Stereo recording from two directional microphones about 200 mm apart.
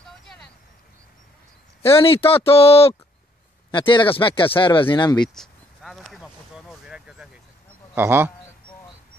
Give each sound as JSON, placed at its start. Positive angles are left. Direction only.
{"t": 1.8, "sound": "speech", "side_deg": 30}
{"t": 5.3, "sound": "a sound", "side_deg": 0}
{"t": 7.9, "sound": "a man's voice", "side_deg": -10}